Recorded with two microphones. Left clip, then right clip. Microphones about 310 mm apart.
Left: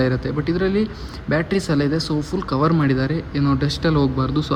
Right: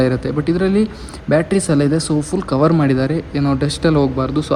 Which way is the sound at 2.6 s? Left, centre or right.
Centre.